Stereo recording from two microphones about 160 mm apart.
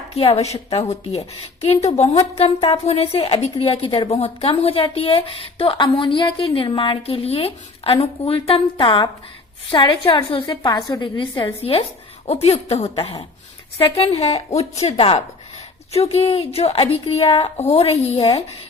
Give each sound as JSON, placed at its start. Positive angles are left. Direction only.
{"t": 0.1, "sound": "a woman's voice", "side_deg": 35}